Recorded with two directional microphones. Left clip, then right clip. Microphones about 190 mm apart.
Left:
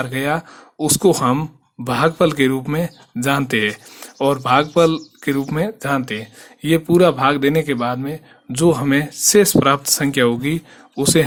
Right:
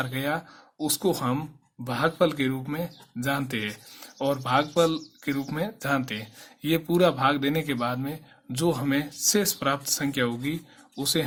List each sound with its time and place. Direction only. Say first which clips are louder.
0.0 s speech: left 8 dB; 35° left (ahead or behind)